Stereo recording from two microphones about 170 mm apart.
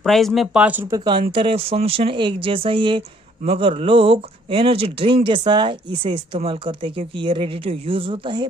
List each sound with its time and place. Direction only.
0.0 s speech: centre (ahead or behind)
0.9 s speech: 30° right (ahead or behind)